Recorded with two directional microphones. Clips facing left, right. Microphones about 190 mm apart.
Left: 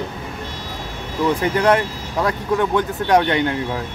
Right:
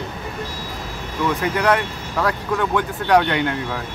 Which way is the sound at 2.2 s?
20° left (ahead or behind).